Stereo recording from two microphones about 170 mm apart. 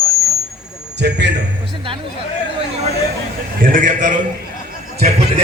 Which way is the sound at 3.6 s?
55° right (ahead or behind).